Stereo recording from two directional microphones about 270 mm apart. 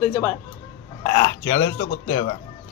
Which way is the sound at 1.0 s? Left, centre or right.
Centre.